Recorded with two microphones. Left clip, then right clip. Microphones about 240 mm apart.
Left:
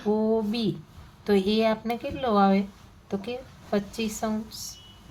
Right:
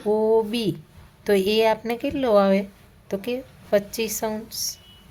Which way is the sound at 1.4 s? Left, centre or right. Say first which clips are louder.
Right 5 dB; right.